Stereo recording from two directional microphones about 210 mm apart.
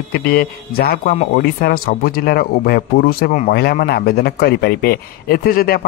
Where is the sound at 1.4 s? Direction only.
45° left (ahead or behind).